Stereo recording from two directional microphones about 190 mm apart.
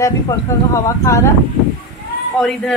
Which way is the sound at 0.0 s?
15° left (ahead or behind).